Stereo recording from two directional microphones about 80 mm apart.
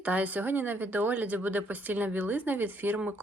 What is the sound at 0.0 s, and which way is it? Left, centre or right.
A woman's voice, centre.